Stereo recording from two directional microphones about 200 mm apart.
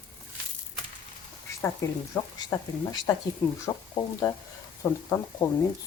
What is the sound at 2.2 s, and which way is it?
Speech, 10° left (ahead or behind).